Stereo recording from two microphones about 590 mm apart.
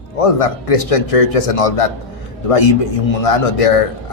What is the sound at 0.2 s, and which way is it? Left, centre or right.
Speech, left.